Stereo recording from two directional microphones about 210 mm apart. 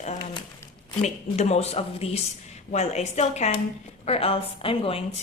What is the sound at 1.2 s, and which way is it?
A woman's voice, 30° left (ahead or behind).